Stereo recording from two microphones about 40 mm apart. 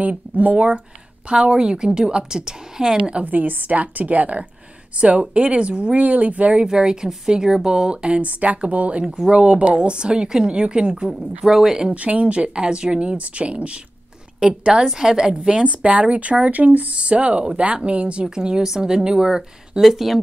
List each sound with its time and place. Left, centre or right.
0.1 s speech: right
1.3 s a woman's voice: right
3.3 s a woman's voice: right
6.6 s a woman's voice: centre; by 9.0 s right
9.0 s a woman's voice: centre
11.1 s speech: centre
11.9 s a woman's voice: right
14.9 s speech: centre
15.3 s speech: right
18.3 s a woman's voice: centre
19.8 s speech: centre